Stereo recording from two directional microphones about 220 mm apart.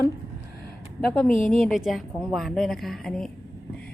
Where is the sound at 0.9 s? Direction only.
5° left (ahead or behind).